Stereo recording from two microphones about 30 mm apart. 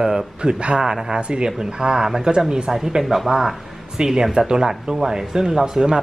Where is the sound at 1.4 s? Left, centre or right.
Right.